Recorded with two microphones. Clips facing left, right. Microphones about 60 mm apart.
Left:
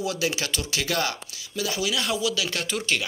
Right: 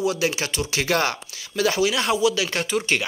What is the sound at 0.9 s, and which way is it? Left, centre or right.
Speech, right.